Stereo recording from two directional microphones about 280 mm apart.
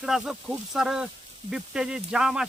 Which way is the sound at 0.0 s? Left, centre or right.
Centre.